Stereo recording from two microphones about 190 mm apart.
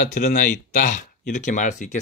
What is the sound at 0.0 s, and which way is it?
Speech, 40° left (ahead or behind).